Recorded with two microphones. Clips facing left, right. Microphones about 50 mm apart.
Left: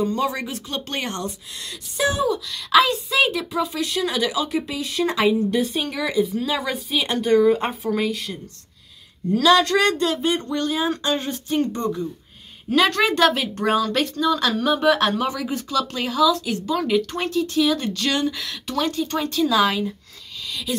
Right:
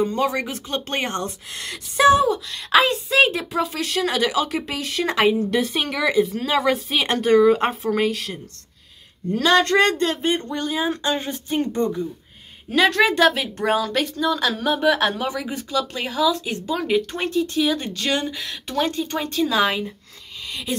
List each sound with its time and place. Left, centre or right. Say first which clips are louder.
0.0 s speech: right 1 dB; right
1.5 s a woman's voice: right 3 dB; right
5.5 s a woman's voice: right 1 dB; right
6.7 s a woman's voice: right 3 dB; right
9.4 s speech: even; right
10.5 s a woman's voice: left 1 dB; centre
12.7 s a woman's voice: right 1 dB; centre; by 19.8 s right
20.4 s a sound: left 1 dB; right